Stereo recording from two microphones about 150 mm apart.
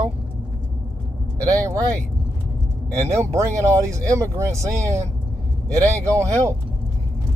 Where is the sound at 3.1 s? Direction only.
20° right (ahead or behind).